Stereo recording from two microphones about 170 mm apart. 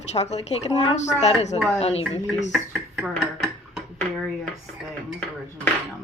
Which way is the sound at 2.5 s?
Centre (ahead or behind).